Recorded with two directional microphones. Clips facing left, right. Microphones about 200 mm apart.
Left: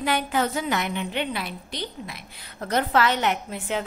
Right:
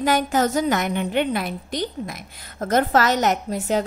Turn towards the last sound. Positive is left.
turn(degrees=-40)  # may be behind; listen again after turning